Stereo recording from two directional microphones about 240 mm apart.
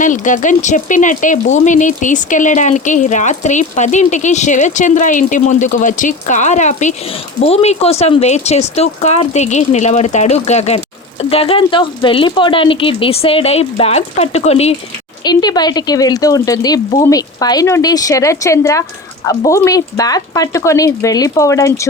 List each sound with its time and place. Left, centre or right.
0.0 s speech: left; by 21.8 s centre